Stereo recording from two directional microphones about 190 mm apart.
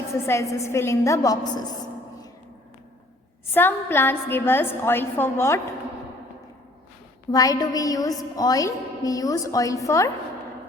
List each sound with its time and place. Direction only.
0.1 s a woman's voice: 15° left (ahead or behind)
3.5 s a woman's voice: 10° left (ahead or behind)
7.3 s a woman's voice: 20° left (ahead or behind)